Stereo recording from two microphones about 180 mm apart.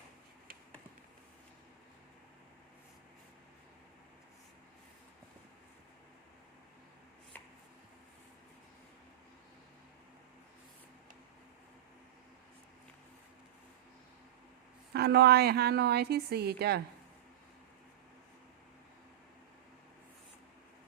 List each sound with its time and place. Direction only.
14.9 s a woman's voice: 65° right (ahead or behind)